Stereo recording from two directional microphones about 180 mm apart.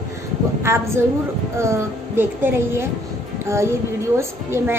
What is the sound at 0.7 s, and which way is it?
A woman's voice, 15° right (ahead or behind).